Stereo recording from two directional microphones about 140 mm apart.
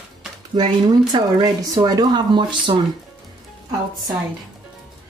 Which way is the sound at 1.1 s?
30° right (ahead or behind).